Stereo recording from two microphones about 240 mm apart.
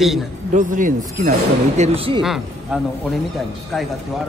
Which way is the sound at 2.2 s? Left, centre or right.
Centre.